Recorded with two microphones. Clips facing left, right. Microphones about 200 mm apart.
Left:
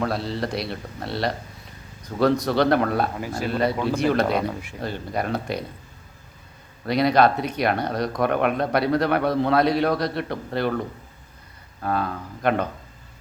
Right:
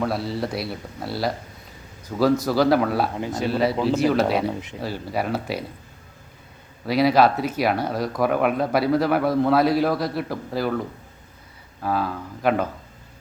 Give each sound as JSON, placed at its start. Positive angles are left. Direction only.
{"t": 0.0, "sound": "speech", "side_deg": 0}
{"t": 3.2, "sound": "speech", "side_deg": -20}
{"t": 3.5, "sound": "speech", "side_deg": -5}
{"t": 6.8, "sound": "speech", "side_deg": -5}